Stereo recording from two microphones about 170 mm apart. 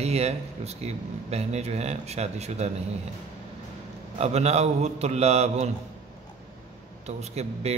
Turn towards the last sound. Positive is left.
turn(degrees=-40)  # may be behind; listen again after turning